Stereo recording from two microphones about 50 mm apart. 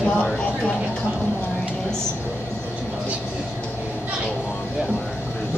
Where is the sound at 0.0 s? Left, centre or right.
Centre.